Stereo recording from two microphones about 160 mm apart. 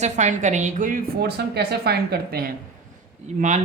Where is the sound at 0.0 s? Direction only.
50° right (ahead or behind); by 2.5 s 80° right.